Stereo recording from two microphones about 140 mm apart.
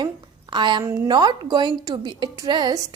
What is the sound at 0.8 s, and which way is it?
Speech, 20° right (ahead or behind).